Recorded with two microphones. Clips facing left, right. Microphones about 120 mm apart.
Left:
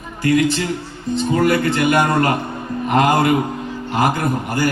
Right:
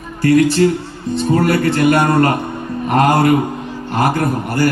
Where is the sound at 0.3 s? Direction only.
55° right (ahead or behind).